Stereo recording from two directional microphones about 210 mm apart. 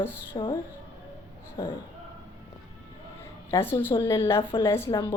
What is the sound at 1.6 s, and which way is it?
Speech, 20° left (ahead or behind).